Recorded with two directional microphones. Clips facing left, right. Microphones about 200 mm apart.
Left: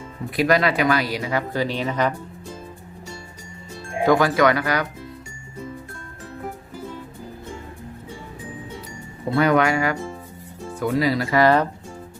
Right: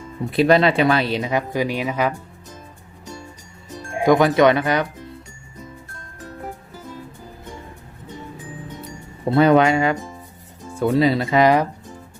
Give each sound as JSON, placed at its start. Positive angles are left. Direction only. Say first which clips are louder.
{"t": 0.3, "sound": "speech", "louder": "right 4 dB", "side_deg": -30}
{"t": 4.0, "sound": "speech", "louder": "right 3 dB", "side_deg": -20}
{"t": 9.3, "sound": "speech", "louder": "right 4 dB", "side_deg": -25}